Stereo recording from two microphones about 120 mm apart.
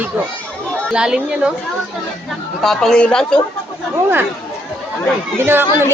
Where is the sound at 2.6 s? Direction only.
5° left (ahead or behind).